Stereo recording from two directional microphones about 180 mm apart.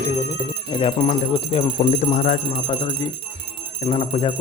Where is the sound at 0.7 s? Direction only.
30° left (ahead or behind).